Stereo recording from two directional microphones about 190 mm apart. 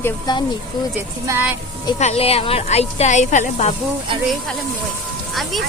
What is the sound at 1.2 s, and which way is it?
Speech, 10° right (ahead or behind).